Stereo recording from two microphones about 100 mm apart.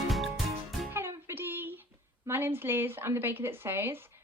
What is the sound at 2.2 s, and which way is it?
Speech, 20° right (ahead or behind).